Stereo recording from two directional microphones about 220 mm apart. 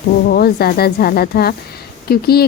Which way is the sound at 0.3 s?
45° left (ahead or behind).